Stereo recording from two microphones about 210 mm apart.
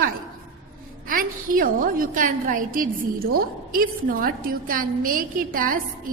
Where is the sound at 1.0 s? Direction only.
40° right (ahead or behind).